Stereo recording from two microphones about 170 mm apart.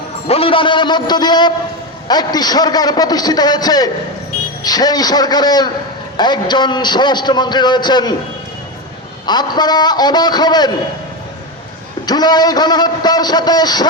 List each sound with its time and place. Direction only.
0.3 s a man's voice: 35° left (ahead or behind)
9.2 s a man's voice: 25° left (ahead or behind)
12.0 s a man's voice: 25° left (ahead or behind)